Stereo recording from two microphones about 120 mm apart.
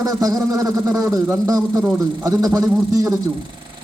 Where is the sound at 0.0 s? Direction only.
30° right (ahead or behind).